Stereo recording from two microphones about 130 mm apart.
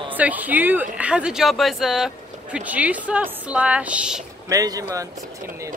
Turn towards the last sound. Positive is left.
turn(degrees=-25)  # may be behind; listen again after turning